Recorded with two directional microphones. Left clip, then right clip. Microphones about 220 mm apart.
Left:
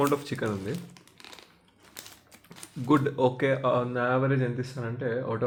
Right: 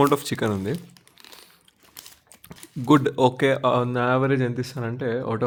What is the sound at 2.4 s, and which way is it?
Speech, 50° right (ahead or behind).